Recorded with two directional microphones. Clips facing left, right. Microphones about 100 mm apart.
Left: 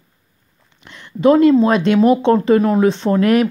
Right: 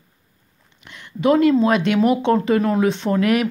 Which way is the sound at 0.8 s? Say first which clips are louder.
Left 5 dB; 30° left (ahead or behind).